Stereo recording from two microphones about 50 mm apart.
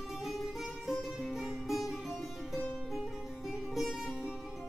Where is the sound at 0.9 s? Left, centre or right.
Centre.